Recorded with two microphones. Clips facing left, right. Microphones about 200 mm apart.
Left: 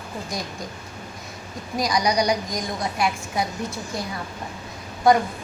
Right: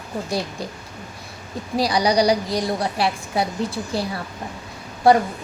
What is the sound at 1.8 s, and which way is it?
A woman's voice, 30° right (ahead or behind).